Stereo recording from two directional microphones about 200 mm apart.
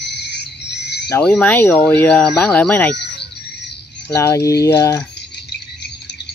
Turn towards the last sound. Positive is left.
turn(degrees=15)  # may be behind; listen again after turning